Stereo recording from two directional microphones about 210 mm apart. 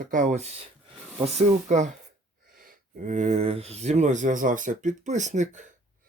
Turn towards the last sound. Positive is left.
turn(degrees=-35)  # may be behind; listen again after turning